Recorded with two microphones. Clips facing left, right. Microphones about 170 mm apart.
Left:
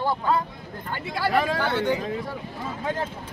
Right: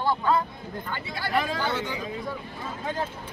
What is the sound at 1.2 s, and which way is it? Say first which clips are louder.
Speech: left 4 dB; 75° left (ahead or behind).